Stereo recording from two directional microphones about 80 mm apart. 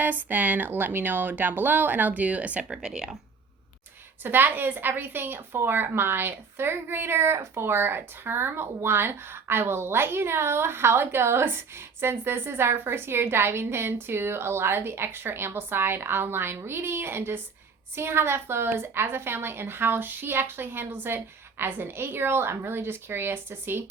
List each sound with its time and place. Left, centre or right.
0.0 s a woman's voice: right
4.2 s a woman's voice: right